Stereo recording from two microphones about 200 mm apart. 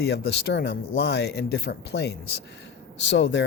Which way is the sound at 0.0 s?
55° left (ahead or behind).